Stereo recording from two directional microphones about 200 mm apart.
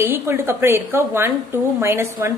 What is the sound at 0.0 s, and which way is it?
A woman's voice, 10° right (ahead or behind).